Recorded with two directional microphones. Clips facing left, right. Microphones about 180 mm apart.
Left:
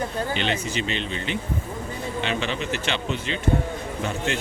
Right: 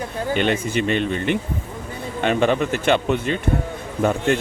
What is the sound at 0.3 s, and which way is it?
A man's voice, 50° right (ahead or behind).